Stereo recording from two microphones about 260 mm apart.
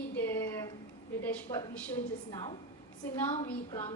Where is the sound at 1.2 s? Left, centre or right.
Centre.